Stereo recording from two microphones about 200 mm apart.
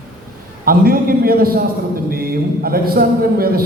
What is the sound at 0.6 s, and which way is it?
A man's voice, 45° right (ahead or behind).